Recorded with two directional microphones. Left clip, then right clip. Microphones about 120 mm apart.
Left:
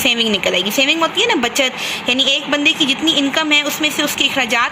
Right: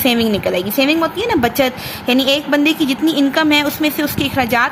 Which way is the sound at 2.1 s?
50° right (ahead or behind).